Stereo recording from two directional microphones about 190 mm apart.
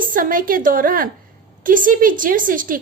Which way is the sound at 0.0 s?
45° right (ahead or behind).